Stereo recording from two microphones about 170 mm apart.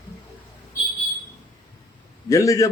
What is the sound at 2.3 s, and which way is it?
Speech, 20° left (ahead or behind).